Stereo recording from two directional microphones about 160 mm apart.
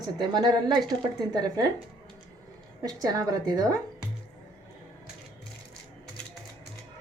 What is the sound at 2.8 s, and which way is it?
Speech, 20° right (ahead or behind).